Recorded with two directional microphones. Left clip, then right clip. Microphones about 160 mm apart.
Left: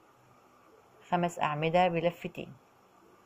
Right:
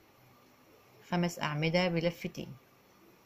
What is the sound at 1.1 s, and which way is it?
A woman's voice, 35° right (ahead or behind).